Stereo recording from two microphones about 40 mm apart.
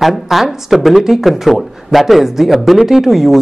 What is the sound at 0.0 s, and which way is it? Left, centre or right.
Speech, centre.